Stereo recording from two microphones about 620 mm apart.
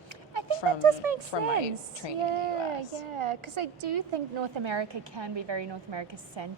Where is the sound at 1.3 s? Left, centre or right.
Left.